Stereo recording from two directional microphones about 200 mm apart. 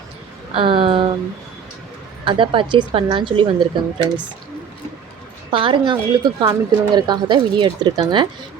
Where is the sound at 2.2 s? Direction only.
25° right (ahead or behind).